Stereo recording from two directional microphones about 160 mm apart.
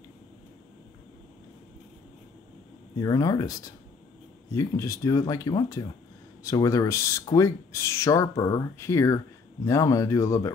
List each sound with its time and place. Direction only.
3.0 s speech: 20° left (ahead or behind)